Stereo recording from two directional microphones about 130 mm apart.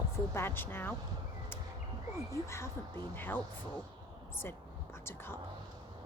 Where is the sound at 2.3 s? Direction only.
20° left (ahead or behind).